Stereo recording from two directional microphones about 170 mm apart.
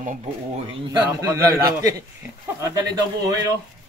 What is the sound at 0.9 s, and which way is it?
A man's voice, 20° right (ahead or behind).